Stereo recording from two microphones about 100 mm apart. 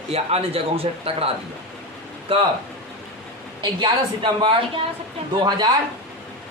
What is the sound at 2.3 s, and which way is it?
Speech, 60° right (ahead or behind).